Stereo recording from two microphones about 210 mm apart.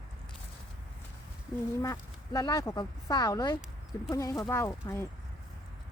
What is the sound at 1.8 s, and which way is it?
Speech, 15° left (ahead or behind).